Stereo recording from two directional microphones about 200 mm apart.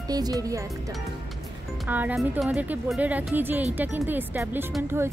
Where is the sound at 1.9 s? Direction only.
10° right (ahead or behind).